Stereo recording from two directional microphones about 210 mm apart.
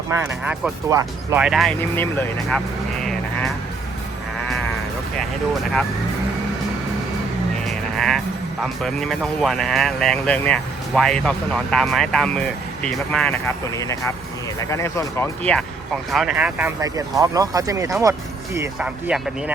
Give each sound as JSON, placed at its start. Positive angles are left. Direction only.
{"t": 0.2, "sound": "speech", "side_deg": -5}
{"t": 3.0, "sound": "music", "side_deg": 0}
{"t": 7.7, "sound": "music", "side_deg": 0}
{"t": 8.6, "sound": "speech", "side_deg": 0}
{"t": 16.1, "sound": "speech", "side_deg": -5}